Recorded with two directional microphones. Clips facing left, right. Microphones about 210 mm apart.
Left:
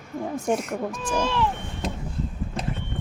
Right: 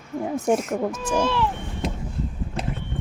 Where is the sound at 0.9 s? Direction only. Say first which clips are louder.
Right 2 dB; 5° right (ahead or behind).